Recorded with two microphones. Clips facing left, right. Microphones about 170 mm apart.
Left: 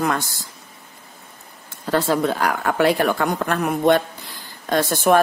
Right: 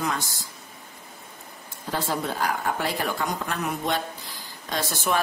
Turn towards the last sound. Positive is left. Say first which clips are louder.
# left 10 dB
turn(degrees=55)  # may be behind; listen again after turning